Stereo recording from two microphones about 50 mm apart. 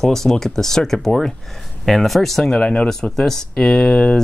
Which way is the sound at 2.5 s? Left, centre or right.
Centre.